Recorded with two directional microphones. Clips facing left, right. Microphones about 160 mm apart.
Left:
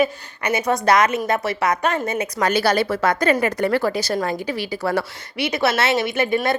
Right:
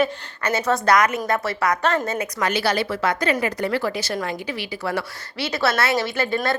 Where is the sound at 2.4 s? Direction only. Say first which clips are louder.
Left 4 dB; 45° left (ahead or behind).